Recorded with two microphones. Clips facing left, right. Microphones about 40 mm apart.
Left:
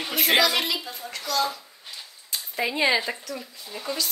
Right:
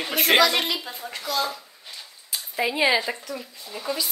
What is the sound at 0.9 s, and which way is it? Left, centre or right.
A woman's voice, centre.